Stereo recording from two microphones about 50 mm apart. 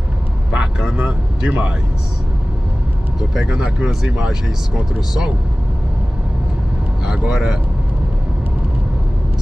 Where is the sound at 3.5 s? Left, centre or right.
Centre.